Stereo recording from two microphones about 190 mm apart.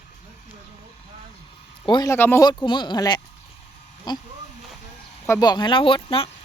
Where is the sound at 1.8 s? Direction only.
20° left (ahead or behind).